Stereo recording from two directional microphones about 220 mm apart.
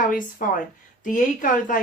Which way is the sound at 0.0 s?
40° left (ahead or behind).